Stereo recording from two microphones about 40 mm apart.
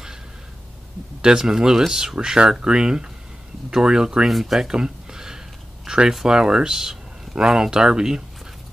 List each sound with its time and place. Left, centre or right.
1.2 s speech: centre
4.3 s speech: centre
4.6 s a sound: centre
5.9 s speech: centre